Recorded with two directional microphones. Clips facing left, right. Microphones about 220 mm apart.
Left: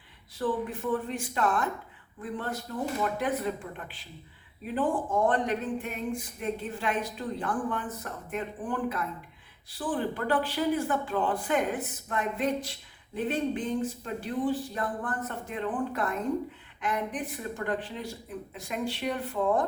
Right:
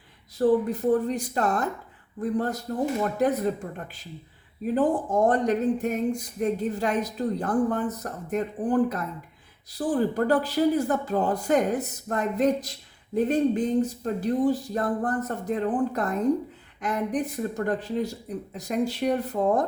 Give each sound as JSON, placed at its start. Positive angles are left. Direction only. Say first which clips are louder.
{"t": 0.3, "sound": "speech", "louder": "right 9 dB", "side_deg": -40}